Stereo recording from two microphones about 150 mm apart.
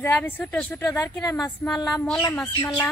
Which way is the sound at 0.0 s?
10° left (ahead or behind).